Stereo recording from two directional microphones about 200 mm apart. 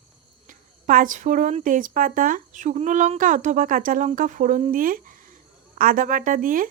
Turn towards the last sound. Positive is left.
turn(degrees=-40)  # may be behind; listen again after turning